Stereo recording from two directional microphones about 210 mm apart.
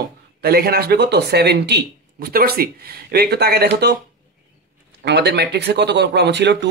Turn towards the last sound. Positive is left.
turn(degrees=-55)  # may be behind; listen again after turning